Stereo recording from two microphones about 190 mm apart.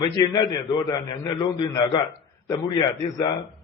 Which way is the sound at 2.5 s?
20° left (ahead or behind).